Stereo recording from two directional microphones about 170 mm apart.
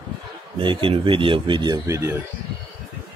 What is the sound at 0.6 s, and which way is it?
Speech, 30° right (ahead or behind).